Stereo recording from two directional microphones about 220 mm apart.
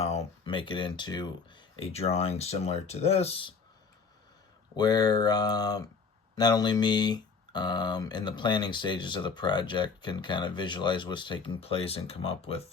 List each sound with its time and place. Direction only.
0.0 s speech: 30° left (ahead or behind)
4.8 s speech: 15° left (ahead or behind)